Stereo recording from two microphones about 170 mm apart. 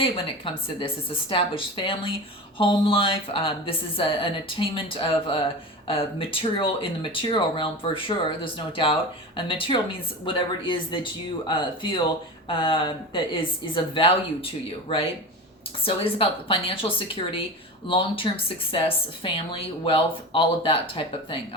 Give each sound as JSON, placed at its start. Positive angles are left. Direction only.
{"t": 0.0, "sound": "speech", "side_deg": 30}
{"t": 17.8, "sound": "speech", "side_deg": 30}